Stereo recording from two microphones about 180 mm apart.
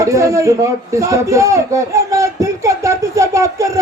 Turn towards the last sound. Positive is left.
turn(degrees=-15)  # may be behind; listen again after turning